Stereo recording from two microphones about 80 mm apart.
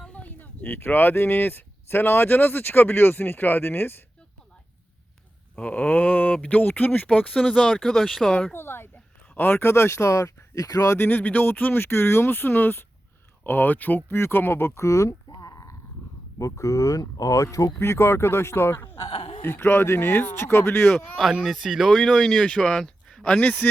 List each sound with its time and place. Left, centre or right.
0.0 s speech: centre
5.5 s speech: centre
7.5 s speech: centre
8.5 s a sound: left
9.3 s speech: left
10.9 s speech: left
17.7 s speech: left
20.9 s speech: centre; by 23.6 s left